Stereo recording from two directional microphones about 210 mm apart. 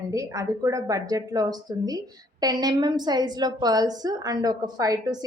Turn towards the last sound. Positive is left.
turn(degrees=-20)  # may be behind; listen again after turning